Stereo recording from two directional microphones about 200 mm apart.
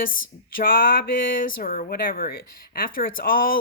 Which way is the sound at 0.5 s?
45° left (ahead or behind).